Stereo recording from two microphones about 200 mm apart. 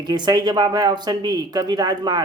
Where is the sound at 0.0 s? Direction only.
20° right (ahead or behind).